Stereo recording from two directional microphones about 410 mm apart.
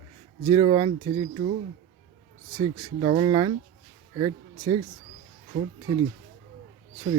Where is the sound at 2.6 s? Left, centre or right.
Centre.